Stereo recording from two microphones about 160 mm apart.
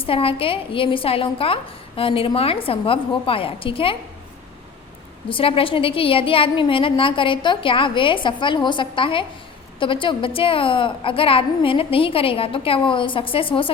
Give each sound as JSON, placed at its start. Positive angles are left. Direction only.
{"t": 0.0, "sound": "a woman's voice", "side_deg": 35}
{"t": 5.3, "sound": "a woman's voice", "side_deg": 35}